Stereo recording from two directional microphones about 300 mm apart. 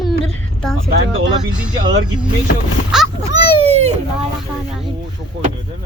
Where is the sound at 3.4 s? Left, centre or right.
Centre.